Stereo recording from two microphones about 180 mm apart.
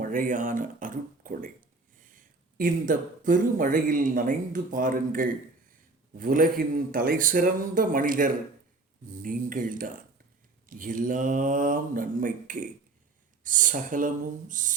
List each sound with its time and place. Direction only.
0.0 s speech: 50° right (ahead or behind)